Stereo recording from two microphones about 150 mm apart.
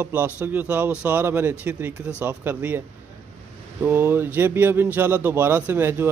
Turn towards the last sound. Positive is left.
turn(degrees=-15)  # may be behind; listen again after turning